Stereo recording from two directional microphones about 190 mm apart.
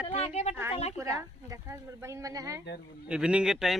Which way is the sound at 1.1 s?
15° right (ahead or behind).